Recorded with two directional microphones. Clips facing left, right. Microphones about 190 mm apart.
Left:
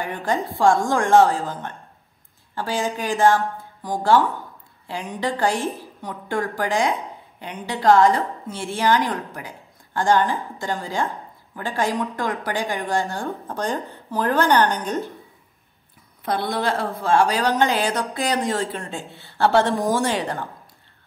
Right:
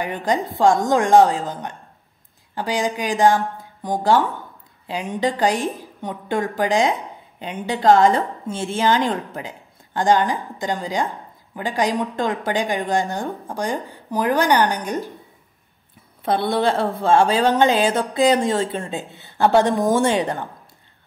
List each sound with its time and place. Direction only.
0.0 s a woman's voice: 15° right (ahead or behind)
16.3 s a woman's voice: 25° right (ahead or behind)